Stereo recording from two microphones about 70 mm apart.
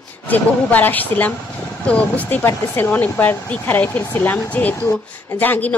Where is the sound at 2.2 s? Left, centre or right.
Left.